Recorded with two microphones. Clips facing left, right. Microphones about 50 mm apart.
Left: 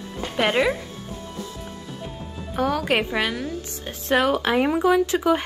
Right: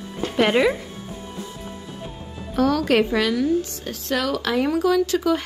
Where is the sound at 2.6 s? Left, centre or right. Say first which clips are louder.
Right 4 dB; centre.